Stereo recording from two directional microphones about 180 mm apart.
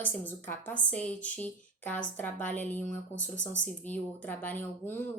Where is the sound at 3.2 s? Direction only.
90° left.